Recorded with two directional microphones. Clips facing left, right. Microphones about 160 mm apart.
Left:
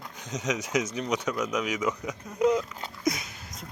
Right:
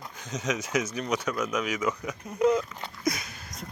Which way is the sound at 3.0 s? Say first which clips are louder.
Left 1 dB; 20° left (ahead or behind).